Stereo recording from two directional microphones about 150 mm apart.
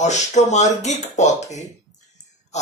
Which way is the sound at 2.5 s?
50° left (ahead or behind).